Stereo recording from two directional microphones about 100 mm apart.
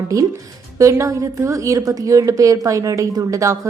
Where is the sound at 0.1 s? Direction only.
35° right (ahead or behind).